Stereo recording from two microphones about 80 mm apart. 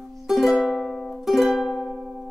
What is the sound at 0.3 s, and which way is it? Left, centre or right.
Music, centre.